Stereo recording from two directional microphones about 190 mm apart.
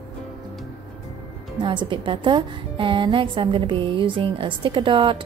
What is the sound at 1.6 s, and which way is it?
A woman's voice, 25° right (ahead or behind).